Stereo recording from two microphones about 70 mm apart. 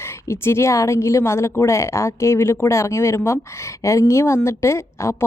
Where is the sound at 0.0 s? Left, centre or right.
Left.